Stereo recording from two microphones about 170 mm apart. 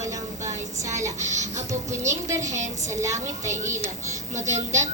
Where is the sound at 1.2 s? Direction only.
45° right (ahead or behind).